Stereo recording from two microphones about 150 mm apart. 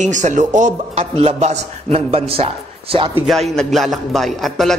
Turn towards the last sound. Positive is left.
turn(degrees=0)  # may be behind; listen again after turning